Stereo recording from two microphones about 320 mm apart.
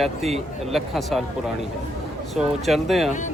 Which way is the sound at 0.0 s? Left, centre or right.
Centre.